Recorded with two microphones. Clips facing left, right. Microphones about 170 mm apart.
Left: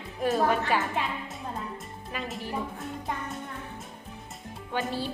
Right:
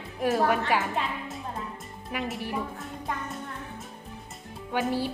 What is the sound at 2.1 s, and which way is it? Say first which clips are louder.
Speech: right 4 dB; 10° right (ahead or behind).